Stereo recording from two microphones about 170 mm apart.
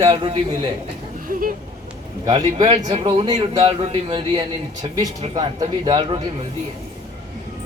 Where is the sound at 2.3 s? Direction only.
35° right (ahead or behind).